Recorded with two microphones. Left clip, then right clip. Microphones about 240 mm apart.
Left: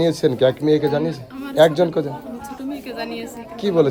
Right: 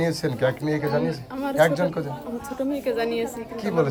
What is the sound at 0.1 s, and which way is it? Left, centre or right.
Speech, right.